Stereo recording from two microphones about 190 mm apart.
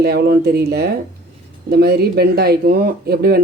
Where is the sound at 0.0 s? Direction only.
55° right (ahead or behind).